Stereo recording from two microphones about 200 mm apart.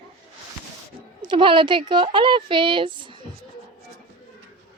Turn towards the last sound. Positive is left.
turn(degrees=-25)  # may be behind; listen again after turning